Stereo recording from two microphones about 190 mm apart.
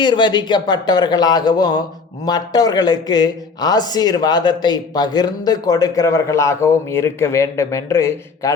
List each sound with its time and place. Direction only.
0.0 s a man's voice: 25° left (ahead or behind)